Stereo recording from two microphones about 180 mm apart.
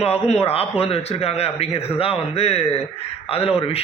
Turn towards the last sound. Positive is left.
turn(degrees=30)  # may be behind; listen again after turning